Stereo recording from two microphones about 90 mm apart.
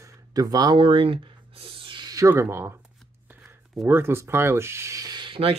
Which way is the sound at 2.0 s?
40° right (ahead or behind).